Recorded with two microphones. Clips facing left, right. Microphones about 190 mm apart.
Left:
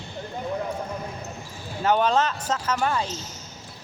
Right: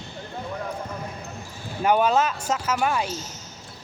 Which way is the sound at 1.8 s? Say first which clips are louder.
Right 1 dB; 10° right (ahead or behind).